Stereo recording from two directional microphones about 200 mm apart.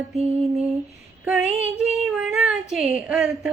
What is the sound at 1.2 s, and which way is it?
Child singing, 5° right (ahead or behind).